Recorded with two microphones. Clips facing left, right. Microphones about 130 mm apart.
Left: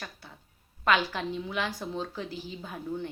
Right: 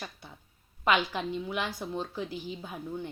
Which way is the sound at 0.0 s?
15° right (ahead or behind).